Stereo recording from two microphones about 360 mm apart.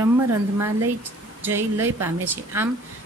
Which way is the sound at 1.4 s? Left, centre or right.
Centre.